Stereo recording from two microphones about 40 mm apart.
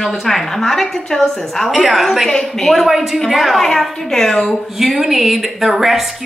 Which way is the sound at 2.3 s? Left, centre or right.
Centre.